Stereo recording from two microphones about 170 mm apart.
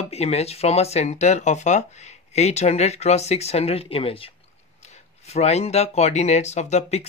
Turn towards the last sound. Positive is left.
turn(degrees=40)  # may be behind; listen again after turning